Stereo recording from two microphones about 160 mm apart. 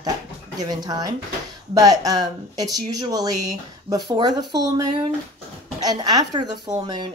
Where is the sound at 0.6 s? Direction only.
25° right (ahead or behind).